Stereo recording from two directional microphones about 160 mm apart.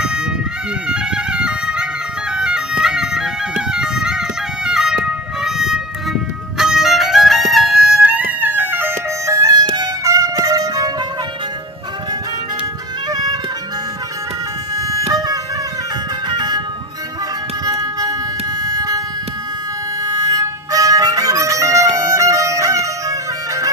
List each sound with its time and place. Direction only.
0.0 s music: 5° right (ahead or behind); by 11.1 s 25° right (ahead or behind)
13.1 s music: 25° right (ahead or behind)
14.8 s music: 20° right (ahead or behind)
16.3 s music: 25° right (ahead or behind)
17.6 s music: 25° right (ahead or behind)
18.6 s a sound: 25° right (ahead or behind)
20.0 s music: 25° right (ahead or behind)